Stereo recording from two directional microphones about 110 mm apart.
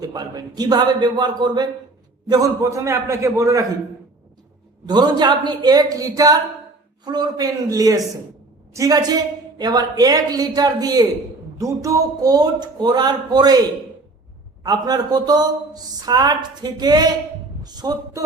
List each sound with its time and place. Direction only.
0.0 s a woman's voice: 35° right (ahead or behind)
4.9 s a woman's voice: 40° right (ahead or behind)
14.6 s a woman's voice: 40° right (ahead or behind)